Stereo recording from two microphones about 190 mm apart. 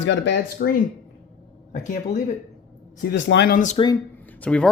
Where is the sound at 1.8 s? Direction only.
40° left (ahead or behind).